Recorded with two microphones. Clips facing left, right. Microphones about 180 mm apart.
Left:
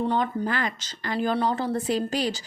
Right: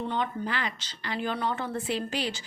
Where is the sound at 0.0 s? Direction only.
40° left (ahead or behind).